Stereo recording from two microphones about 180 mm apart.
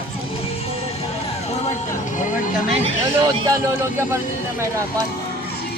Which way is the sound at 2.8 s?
20° right (ahead or behind).